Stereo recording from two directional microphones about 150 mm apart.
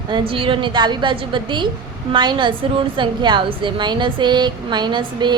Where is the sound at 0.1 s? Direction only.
35° right (ahead or behind).